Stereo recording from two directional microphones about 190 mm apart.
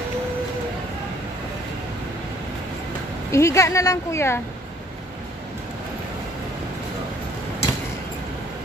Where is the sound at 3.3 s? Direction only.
15° left (ahead or behind).